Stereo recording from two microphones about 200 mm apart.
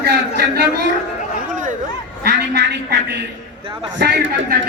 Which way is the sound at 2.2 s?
55° right (ahead or behind).